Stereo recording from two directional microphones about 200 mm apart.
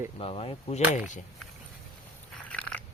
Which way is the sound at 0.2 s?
30° left (ahead or behind).